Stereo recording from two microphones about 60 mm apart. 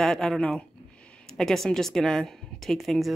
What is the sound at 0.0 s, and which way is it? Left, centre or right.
A woman's voice, centre.